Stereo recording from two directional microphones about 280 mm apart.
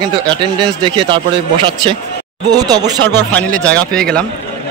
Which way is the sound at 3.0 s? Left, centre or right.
Centre.